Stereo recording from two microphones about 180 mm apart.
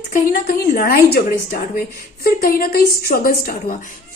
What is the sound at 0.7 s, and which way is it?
Speech, 60° left (ahead or behind).